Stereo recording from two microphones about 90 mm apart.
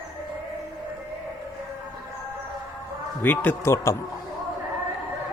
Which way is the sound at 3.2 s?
20° left (ahead or behind).